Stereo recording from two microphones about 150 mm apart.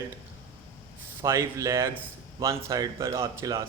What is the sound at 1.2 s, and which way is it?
Speech, 20° right (ahead or behind).